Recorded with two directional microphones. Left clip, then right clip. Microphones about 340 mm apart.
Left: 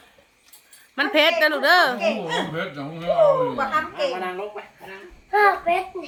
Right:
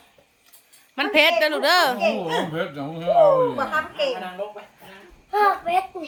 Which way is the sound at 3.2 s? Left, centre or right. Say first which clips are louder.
Left 1 dB; right.